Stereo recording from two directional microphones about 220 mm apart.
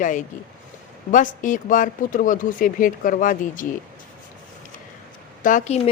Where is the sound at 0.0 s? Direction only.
35° left (ahead or behind).